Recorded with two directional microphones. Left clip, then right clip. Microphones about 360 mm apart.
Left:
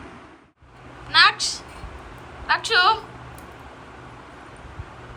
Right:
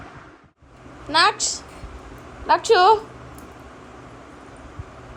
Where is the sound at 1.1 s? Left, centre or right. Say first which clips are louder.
Left 1 dB; centre.